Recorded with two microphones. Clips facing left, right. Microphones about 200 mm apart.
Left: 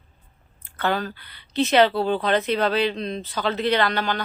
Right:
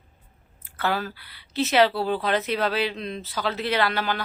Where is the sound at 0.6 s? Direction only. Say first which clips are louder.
Left 2 dB; 5° right (ahead or behind).